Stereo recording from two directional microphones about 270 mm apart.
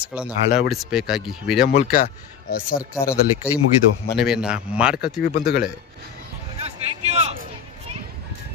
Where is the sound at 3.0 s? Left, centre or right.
Centre.